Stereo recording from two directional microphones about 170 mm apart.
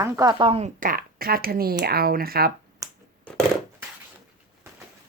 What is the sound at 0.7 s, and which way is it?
Speech, 55° right (ahead or behind).